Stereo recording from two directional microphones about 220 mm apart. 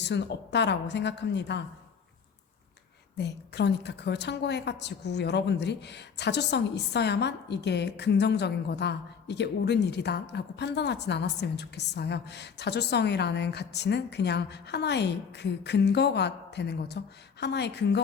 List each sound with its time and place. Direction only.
0.0 s a woman's voice: 50° left (ahead or behind)
3.2 s a woman's voice: 50° left (ahead or behind)